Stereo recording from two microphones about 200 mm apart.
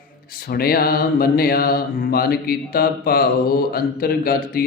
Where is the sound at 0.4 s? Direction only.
50° left (ahead or behind).